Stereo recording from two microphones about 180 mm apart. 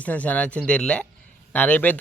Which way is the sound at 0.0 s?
10° left (ahead or behind).